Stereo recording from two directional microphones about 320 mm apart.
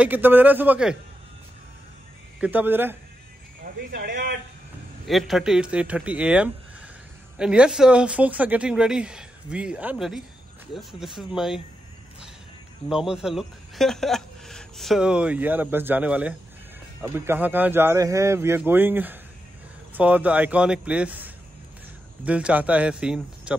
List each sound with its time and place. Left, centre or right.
0.0 s speech: centre
2.4 s speech: centre
3.9 s a man's voice: right
5.0 s speech: centre
12.8 s speech: centre